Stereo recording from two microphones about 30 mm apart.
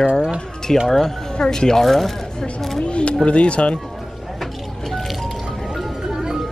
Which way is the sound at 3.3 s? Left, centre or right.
Left.